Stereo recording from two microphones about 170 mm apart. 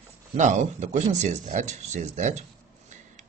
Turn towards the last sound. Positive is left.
turn(degrees=-45)  # may be behind; listen again after turning